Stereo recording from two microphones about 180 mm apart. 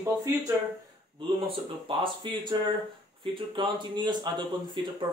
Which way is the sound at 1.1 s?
30° right (ahead or behind).